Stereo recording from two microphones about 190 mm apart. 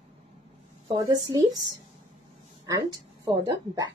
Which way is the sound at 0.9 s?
20° right (ahead or behind).